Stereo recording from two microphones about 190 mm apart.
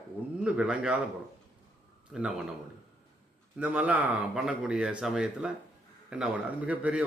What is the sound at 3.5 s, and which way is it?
Speech, 5° right (ahead or behind).